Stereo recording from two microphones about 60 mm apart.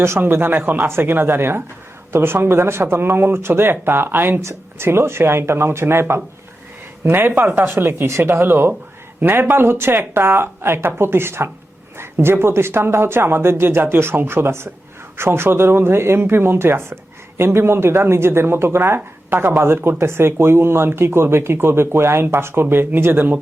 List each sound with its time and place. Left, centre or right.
0.2 s speech: right
4.4 s speech: right